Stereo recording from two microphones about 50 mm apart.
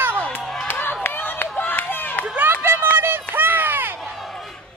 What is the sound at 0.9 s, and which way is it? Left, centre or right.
Run, left.